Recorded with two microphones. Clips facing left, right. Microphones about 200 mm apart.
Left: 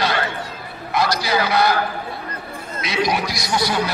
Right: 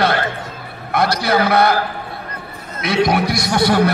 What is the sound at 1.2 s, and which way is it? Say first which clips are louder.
Speech: right 6 dB; 60° right (ahead or behind).